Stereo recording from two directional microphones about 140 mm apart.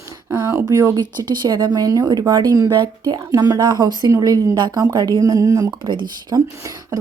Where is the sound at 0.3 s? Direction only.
15° right (ahead or behind).